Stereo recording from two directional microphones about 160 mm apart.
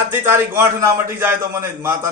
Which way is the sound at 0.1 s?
15° right (ahead or behind).